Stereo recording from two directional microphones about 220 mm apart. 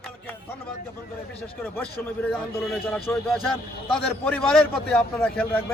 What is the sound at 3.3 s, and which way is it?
A man's voice, centre (ahead or behind).